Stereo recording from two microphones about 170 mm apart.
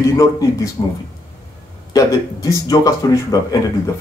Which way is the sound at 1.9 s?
20° left (ahead or behind).